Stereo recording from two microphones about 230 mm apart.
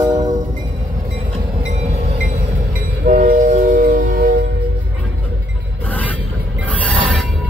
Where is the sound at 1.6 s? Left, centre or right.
Right.